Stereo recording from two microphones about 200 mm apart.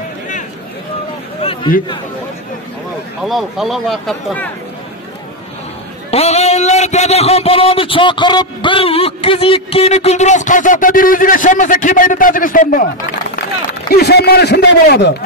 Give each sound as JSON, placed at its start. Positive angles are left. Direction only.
{"t": 1.4, "sound": "a sound", "side_deg": 25}
{"t": 3.3, "sound": "a man's voice", "side_deg": 0}
{"t": 6.0, "sound": "a man's voice", "side_deg": 30}
{"t": 13.8, "sound": "a man's voice", "side_deg": 55}